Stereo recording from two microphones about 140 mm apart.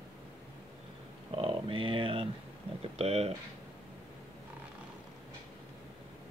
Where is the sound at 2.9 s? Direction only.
50° right (ahead or behind).